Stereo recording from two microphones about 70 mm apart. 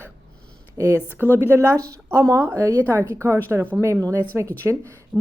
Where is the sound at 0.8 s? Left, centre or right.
Right.